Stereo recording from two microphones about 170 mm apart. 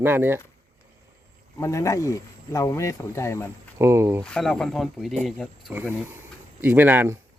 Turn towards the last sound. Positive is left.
turn(degrees=-10)  # may be behind; listen again after turning